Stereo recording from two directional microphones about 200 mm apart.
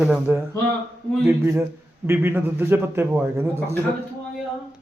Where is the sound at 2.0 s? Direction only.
10° right (ahead or behind).